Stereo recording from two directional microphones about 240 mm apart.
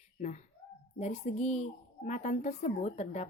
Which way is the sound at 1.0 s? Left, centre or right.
Left.